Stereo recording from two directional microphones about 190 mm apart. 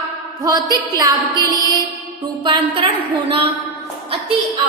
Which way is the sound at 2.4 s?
25° right (ahead or behind).